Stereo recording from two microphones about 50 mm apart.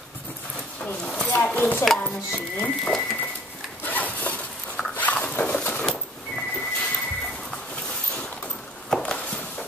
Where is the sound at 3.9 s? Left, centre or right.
Left.